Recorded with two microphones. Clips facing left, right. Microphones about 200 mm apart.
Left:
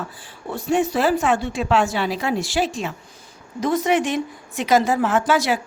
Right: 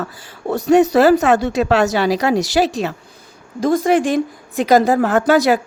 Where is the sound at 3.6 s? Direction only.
50° right (ahead or behind).